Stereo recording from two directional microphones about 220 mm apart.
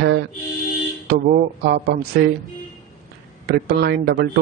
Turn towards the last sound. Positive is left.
turn(degrees=-50)  # may be behind; listen again after turning